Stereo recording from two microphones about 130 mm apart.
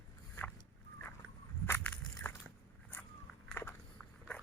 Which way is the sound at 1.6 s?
15° left (ahead or behind).